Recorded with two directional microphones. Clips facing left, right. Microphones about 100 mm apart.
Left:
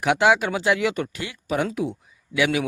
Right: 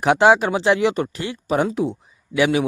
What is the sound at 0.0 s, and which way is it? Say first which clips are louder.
A man's voice: right 4 dB; 35° right (ahead or behind).